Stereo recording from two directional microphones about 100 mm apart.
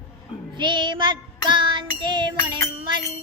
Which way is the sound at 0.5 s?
50° right (ahead or behind).